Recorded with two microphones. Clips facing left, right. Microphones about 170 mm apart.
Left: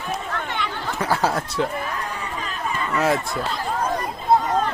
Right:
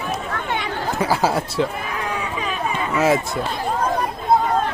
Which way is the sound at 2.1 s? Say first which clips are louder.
Right 5 dB; 70° right (ahead or behind).